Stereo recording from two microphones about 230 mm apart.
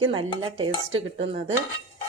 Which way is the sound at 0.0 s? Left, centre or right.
Right.